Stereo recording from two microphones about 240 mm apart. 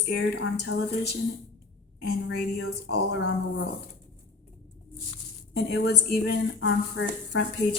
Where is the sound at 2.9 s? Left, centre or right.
Left.